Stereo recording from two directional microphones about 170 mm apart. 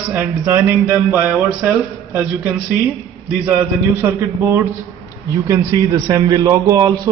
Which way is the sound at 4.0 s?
15° right (ahead or behind).